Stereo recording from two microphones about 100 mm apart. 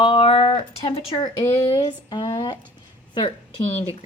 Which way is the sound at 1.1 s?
40° left (ahead or behind).